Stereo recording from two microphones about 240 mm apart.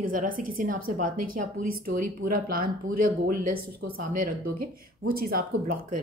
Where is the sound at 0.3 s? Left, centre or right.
Right.